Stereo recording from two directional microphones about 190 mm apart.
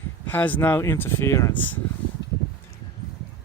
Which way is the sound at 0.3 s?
10° left (ahead or behind).